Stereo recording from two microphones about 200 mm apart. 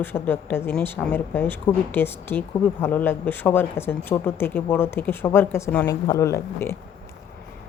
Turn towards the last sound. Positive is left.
turn(degrees=15)  # may be behind; listen again after turning